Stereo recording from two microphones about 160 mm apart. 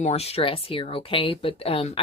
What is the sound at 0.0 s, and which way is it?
Speech, 40° left (ahead or behind).